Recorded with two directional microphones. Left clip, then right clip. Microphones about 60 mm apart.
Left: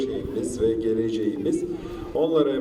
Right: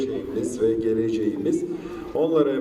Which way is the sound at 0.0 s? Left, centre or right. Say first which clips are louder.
Right 1 dB; centre.